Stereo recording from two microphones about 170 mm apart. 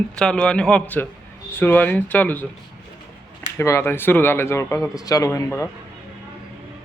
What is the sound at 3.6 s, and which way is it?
A man's voice, 15° left (ahead or behind).